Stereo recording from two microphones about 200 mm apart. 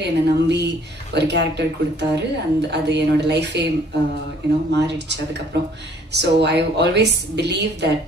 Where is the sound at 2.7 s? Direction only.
60° right (ahead or behind).